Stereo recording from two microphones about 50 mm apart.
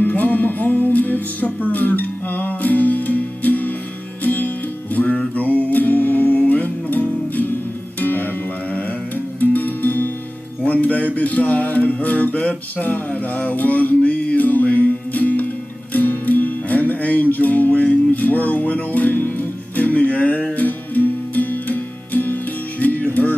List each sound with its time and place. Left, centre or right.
0.0 s music: left
5.0 s music: centre
5.3 s music: left